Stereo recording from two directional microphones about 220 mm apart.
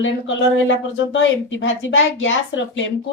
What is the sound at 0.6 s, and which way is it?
A woman's voice, 55° left (ahead or behind).